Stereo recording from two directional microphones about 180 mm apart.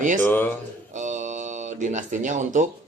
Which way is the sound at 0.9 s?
40° right (ahead or behind).